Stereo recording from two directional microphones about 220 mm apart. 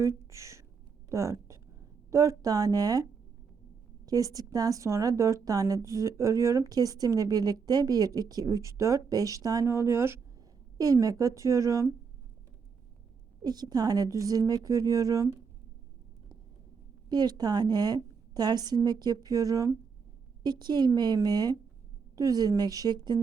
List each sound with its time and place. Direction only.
0.0 s a woman's voice: 15° right (ahead or behind)
13.4 s a woman's voice: 20° right (ahead or behind)
17.1 s a woman's voice: 15° right (ahead or behind)